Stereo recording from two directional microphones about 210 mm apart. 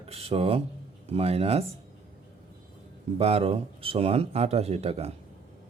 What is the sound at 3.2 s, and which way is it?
Speech, 30° right (ahead or behind).